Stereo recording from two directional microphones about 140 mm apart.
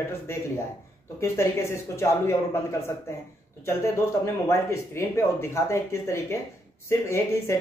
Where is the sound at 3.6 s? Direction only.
20° left (ahead or behind).